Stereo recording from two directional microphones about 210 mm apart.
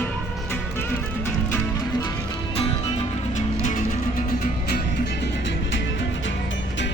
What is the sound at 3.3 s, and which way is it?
Music, 35° left (ahead or behind).